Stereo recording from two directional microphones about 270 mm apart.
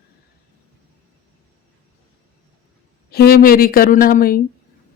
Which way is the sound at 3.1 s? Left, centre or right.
Left.